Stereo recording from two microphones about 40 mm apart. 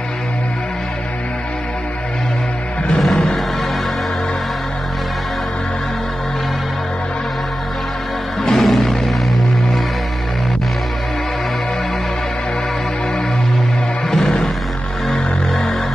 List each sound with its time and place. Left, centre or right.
2.9 s music: centre
8.5 s music: centre
14.1 s music: centre